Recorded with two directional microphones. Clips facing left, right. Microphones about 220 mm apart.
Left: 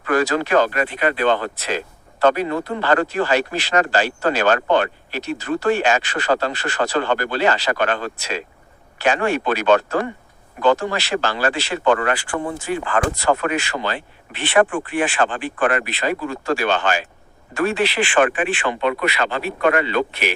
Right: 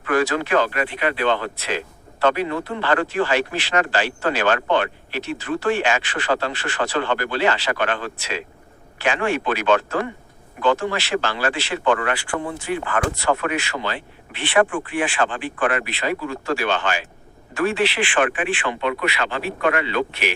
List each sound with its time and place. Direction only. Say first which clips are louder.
0.0 s speech: left 1 dB; 40° left (ahead or behind)